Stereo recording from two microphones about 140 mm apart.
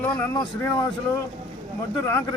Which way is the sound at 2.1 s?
20° left (ahead or behind).